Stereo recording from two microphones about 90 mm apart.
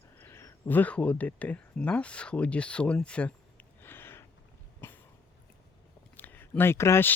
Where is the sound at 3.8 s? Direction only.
25° left (ahead or behind).